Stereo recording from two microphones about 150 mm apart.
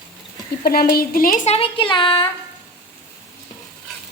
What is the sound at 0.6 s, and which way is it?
Speech, 90° left.